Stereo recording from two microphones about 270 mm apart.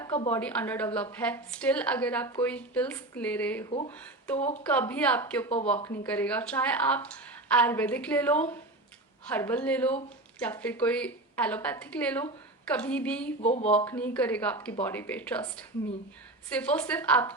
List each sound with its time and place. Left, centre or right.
0.0 s a woman's voice: centre
4.4 s speech: left
4.6 s speech: centre
13.4 s speech: left
13.7 s speech: centre